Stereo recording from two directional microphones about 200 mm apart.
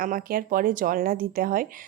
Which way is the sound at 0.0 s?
45° right (ahead or behind).